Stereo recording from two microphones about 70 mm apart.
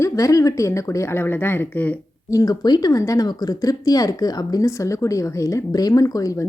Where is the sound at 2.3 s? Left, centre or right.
Left.